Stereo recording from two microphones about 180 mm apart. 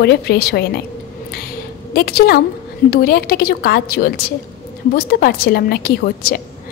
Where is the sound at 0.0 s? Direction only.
65° left (ahead or behind).